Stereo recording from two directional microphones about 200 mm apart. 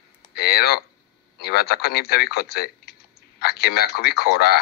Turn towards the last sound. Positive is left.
turn(degrees=50)  # may be behind; listen again after turning